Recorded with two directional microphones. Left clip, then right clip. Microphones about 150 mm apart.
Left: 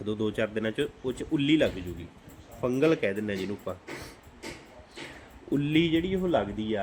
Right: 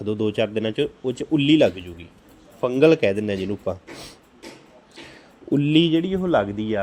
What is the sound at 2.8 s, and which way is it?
Speech, 25° right (ahead or behind).